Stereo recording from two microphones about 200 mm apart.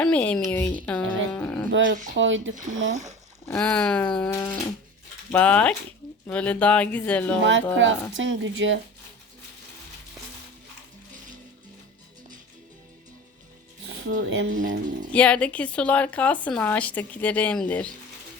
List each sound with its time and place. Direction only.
0.0 s a woman's voice: 5° left (ahead or behind)
1.0 s dog: 75° right (ahead or behind)
1.3 s dog: 10° left (ahead or behind)
1.7 s speech: 65° right (ahead or behind)
2.9 s speech: 35° right (ahead or behind)
3.5 s a woman's voice: 5° left (ahead or behind)
7.4 s speech: 70° right (ahead or behind)
14.1 s speech: 75° right (ahead or behind)
14.4 s speech: 40° right (ahead or behind)
15.1 s a woman's voice: 5° left (ahead or behind)